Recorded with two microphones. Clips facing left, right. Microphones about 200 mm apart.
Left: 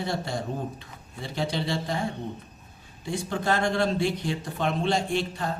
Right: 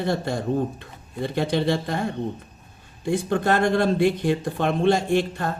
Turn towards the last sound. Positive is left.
turn(degrees=-55)  # may be behind; listen again after turning